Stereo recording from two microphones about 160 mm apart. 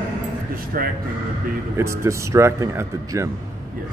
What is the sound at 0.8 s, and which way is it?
Speech, 65° right (ahead or behind).